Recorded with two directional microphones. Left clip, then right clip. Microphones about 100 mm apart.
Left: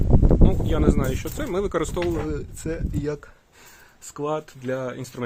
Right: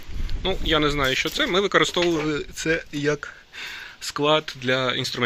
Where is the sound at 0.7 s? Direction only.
15° left (ahead or behind).